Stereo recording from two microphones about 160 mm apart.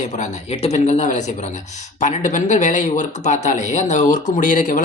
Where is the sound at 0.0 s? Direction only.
45° left (ahead or behind).